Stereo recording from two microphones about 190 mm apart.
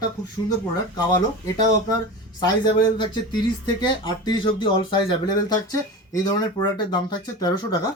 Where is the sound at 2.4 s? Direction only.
25° left (ahead or behind).